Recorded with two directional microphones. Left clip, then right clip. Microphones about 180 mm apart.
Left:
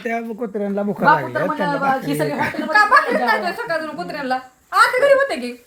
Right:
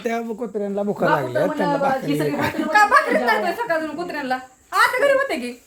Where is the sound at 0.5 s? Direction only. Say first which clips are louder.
Left 1 dB; 10° left (ahead or behind).